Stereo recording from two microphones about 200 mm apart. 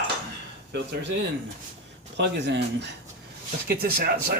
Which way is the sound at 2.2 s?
60° right (ahead or behind).